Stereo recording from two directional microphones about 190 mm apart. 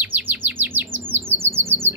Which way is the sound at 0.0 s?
10° right (ahead or behind).